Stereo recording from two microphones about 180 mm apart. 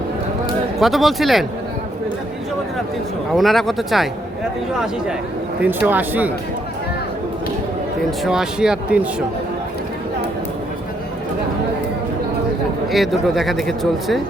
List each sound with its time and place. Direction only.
0.8 s speech: centre (ahead or behind)
3.3 s speech: centre (ahead or behind)
5.5 s speech: 10° right (ahead or behind)
8.2 s speech: 5° right (ahead or behind)
12.9 s speech: centre (ahead or behind)